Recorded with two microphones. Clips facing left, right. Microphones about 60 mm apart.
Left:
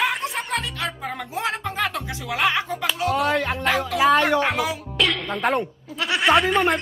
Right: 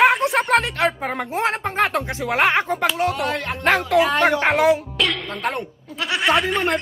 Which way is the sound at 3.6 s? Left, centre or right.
Right.